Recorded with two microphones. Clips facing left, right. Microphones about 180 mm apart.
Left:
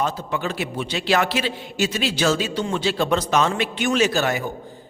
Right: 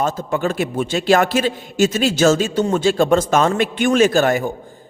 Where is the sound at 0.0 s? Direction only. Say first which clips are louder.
Right 5 dB; 45° right (ahead or behind).